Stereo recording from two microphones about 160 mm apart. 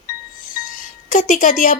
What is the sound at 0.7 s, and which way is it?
Music, 55° left (ahead or behind).